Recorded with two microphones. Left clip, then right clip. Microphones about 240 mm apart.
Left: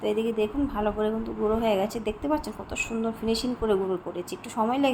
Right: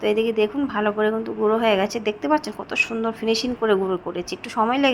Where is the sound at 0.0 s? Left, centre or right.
Centre.